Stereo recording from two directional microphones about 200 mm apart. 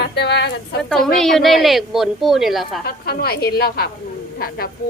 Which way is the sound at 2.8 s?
50° left (ahead or behind).